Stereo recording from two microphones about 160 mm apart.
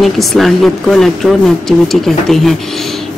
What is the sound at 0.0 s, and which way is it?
Speech, centre (ahead or behind).